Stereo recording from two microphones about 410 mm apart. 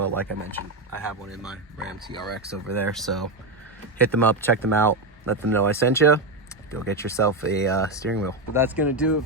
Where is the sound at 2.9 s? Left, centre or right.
Centre.